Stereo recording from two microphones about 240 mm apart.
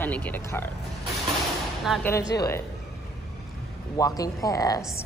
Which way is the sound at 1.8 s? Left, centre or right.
Centre.